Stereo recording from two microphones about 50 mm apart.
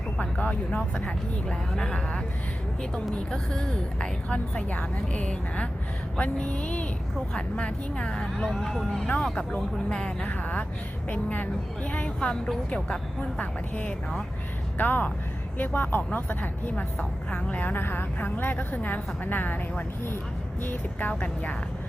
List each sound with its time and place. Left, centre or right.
0.2 s a woman's voice: left
0.9 s speech: centre
3.3 s a woman's voice: centre
8.4 s speech: centre
9.0 s speech: centre
10.2 s a woman's voice: left
17.7 s a woman's voice: left